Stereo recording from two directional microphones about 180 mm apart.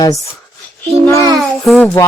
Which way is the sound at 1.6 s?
Centre (ahead or behind).